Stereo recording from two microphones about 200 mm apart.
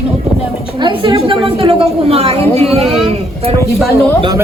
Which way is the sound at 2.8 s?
Centre (ahead or behind).